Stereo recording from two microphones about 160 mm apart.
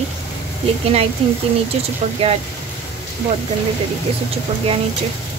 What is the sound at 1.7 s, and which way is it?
Speech, 40° right (ahead or behind).